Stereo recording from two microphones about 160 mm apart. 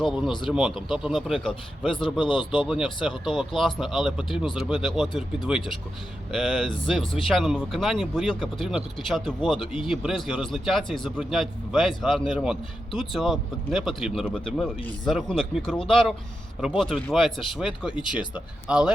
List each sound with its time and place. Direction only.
0.0 s a man's voice: 5° right (ahead or behind)
2.2 s speech: 30° left (ahead or behind)
2.6 s a man's voice: 5° right (ahead or behind)